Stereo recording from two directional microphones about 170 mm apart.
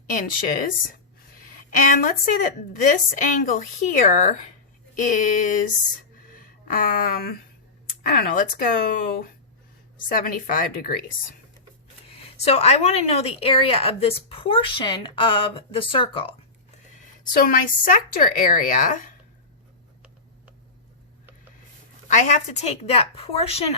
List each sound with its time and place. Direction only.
0.1 s a woman's voice: 55° left (ahead or behind)
1.7 s a woman's voice: 50° left (ahead or behind)
6.7 s speech: 55° left (ahead or behind)
12.1 s a woman's voice: 35° left (ahead or behind)
16.9 s a woman's voice: 60° left (ahead or behind)
22.1 s a woman's voice: 45° left (ahead or behind)